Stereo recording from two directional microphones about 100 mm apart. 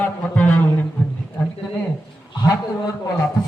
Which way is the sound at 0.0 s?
15° left (ahead or behind).